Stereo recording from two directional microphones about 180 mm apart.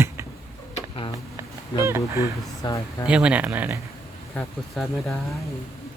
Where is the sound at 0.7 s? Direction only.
30° left (ahead or behind).